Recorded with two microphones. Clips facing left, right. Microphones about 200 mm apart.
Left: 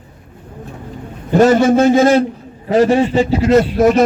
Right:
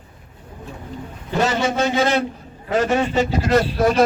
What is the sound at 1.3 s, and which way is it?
Speech, 50° left (ahead or behind).